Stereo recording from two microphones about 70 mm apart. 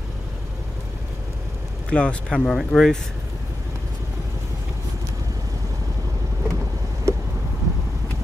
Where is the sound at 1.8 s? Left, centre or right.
Centre.